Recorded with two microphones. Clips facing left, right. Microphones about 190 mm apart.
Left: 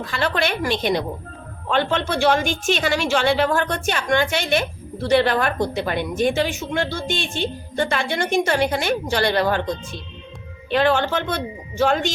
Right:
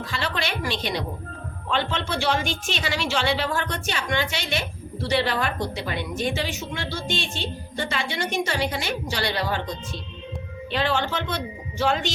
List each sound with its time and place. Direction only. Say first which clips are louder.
0.0 s a woman's voice: left 6 dB; 50° left (ahead or behind)